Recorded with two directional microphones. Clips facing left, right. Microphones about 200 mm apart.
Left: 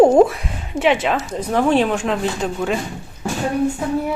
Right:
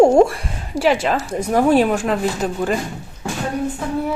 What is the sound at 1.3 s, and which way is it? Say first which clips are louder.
A woman's voice: right 2 dB; 10° right (ahead or behind).